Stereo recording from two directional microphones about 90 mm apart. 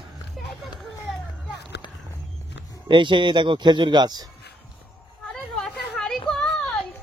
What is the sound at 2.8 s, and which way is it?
Speech, 60° right (ahead or behind).